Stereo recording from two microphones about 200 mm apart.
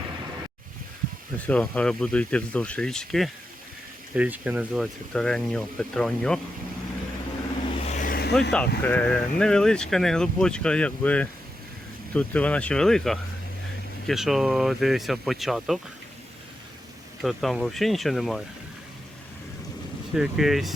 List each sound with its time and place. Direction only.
1.5 s speech: 5° left (ahead or behind)
7.8 s vehicle: 35° left (ahead or behind)
8.3 s speech: 5° left (ahead or behind)
17.2 s speech: centre (ahead or behind)
20.1 s speech: centre (ahead or behind)